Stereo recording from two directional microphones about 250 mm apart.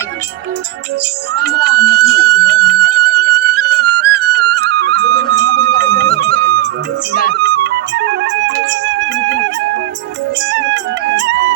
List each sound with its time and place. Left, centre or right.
1.5 s music: right
7.3 s music: right